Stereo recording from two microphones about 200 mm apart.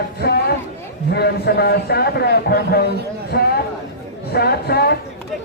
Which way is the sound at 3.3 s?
55° left (ahead or behind).